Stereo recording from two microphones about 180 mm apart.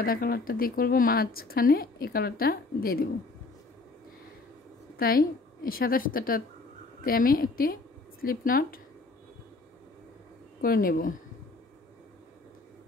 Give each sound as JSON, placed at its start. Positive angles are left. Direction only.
{"t": 0.0, "sound": "speech", "side_deg": 55}
{"t": 4.9, "sound": "a woman's voice", "side_deg": 55}
{"t": 10.6, "sound": "speech", "side_deg": 55}